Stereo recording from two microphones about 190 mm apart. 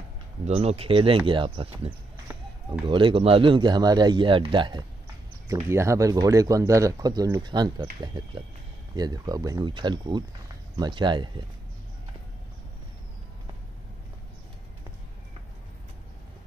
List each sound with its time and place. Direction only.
0.5 s speech: 35° right (ahead or behind)